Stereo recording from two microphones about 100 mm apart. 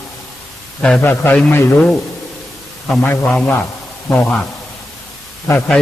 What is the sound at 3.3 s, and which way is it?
Speech, 10° left (ahead or behind).